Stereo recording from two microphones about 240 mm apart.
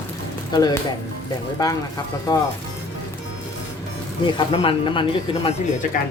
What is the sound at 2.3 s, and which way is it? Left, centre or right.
Speech, centre.